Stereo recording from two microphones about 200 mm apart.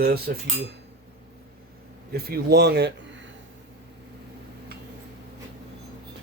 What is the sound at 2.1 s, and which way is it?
Speech, 50° right (ahead or behind).